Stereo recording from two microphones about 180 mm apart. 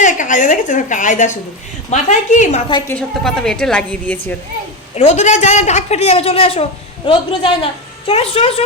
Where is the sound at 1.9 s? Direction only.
40° left (ahead or behind).